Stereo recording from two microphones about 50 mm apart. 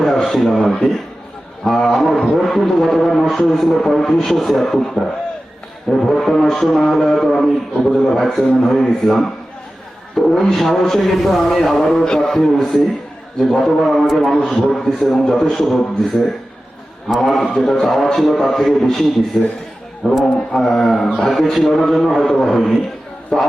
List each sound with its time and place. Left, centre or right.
0.0 s speech: centre
1.6 s music: centre
6.1 s music: centre
12.0 s a man's voice: centre
13.5 s music: centre
14.3 s a man's voice: centre
17.2 s music: centre
19.3 s music: centre
20.2 s a man's voice: centre
21.2 s music: centre
23.3 s a man's voice: centre